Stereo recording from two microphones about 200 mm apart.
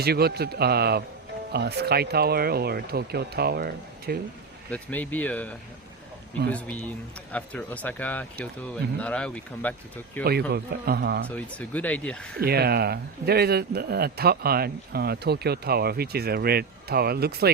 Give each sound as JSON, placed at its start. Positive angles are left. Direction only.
{"t": 0.0, "sound": "speech", "side_deg": -50}
{"t": 4.7, "sound": "speech", "side_deg": 10}
{"t": 7.3, "sound": "speech", "side_deg": 5}
{"t": 10.2, "sound": "speech", "side_deg": -50}
{"t": 11.3, "sound": "speech", "side_deg": 5}
{"t": 12.4, "sound": "speech", "side_deg": -50}